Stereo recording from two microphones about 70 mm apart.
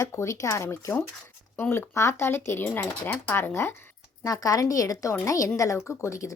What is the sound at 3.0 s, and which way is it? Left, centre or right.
Speech, left.